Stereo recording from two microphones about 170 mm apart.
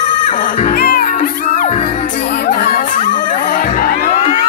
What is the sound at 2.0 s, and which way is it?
Music, 55° left (ahead or behind).